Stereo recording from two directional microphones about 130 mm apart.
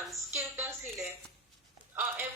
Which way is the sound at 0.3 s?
20° right (ahead or behind).